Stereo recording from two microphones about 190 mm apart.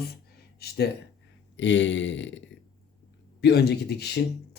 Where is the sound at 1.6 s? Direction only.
75° left (ahead or behind).